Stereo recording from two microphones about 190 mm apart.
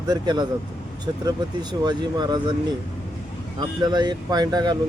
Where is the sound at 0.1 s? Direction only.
20° right (ahead or behind).